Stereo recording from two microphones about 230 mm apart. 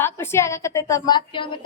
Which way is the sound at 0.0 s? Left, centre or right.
Centre.